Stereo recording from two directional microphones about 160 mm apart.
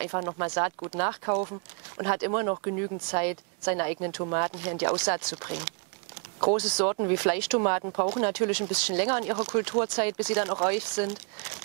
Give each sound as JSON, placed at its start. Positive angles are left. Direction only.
{"t": 0.0, "sound": "speech", "side_deg": -20}
{"t": 6.8, "sound": "speech", "side_deg": -15}